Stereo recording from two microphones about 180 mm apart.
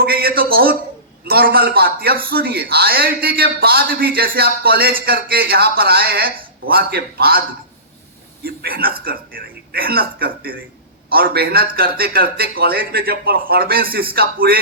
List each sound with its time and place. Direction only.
0.0 s a sound: 55° right (ahead or behind)
1.2 s a man's voice: 60° right (ahead or behind)
8.4 s a man's voice: 55° right (ahead or behind)